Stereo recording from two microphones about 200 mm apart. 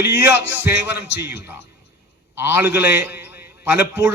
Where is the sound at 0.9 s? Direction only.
60° left (ahead or behind).